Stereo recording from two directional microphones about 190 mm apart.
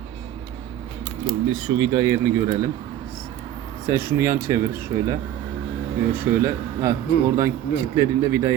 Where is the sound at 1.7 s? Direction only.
20° right (ahead or behind).